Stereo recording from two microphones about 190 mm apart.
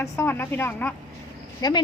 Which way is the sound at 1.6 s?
20° left (ahead or behind).